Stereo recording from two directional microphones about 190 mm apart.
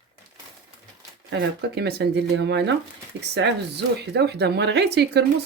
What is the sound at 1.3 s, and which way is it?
Speech, 65° right (ahead or behind).